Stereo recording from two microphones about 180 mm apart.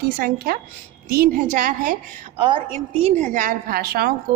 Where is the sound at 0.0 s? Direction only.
55° right (ahead or behind).